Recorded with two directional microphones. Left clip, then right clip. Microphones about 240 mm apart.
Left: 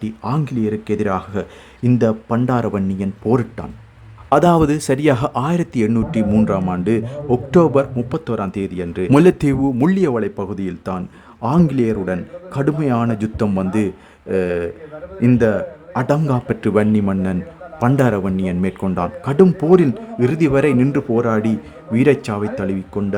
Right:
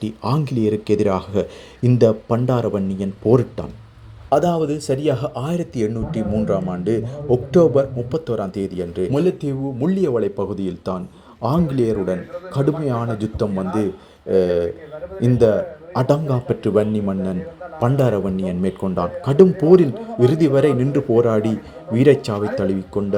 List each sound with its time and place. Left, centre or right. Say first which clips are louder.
0.0 s speech: even; centre
4.3 s a man's voice: left 4 dB; left
9.1 s speech: left 9 dB; left
10.2 s a man's voice: right 1 dB; centre